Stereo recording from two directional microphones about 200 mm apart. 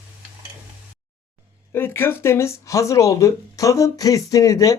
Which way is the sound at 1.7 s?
10° left (ahead or behind).